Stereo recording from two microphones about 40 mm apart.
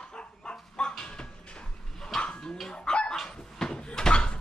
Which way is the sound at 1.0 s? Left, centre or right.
Left.